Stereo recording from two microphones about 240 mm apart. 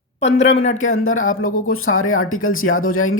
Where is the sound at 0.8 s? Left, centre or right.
Left.